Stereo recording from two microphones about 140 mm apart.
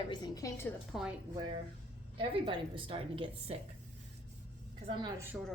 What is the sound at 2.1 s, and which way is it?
A woman's voice, 35° right (ahead or behind).